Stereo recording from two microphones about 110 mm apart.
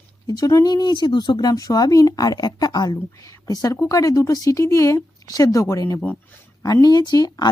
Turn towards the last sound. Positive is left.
turn(degrees=35)  # may be behind; listen again after turning